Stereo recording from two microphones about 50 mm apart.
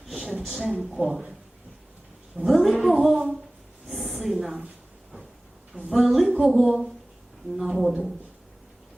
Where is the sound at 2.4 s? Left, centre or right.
Centre.